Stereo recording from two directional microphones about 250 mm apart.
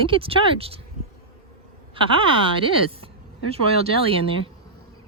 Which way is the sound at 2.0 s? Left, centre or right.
Right.